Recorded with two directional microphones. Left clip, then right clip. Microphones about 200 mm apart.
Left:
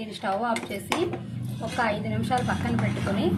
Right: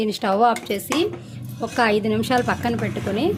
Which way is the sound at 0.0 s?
55° right (ahead or behind).